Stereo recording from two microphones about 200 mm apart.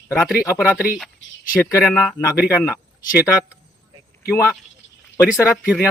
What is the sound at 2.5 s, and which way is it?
Speech, 15° left (ahead or behind).